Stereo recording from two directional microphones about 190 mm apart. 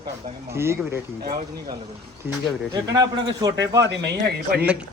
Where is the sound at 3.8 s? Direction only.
65° right (ahead or behind).